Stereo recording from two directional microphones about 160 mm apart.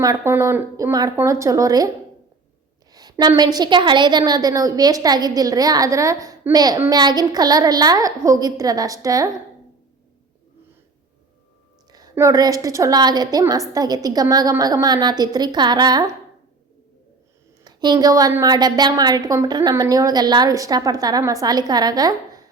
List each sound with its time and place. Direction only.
0.0 s a woman's voice: 20° right (ahead or behind)
2.9 s a woman's voice: 25° right (ahead or behind)
11.9 s a woman's voice: 25° right (ahead or behind)
17.6 s a woman's voice: 25° right (ahead or behind)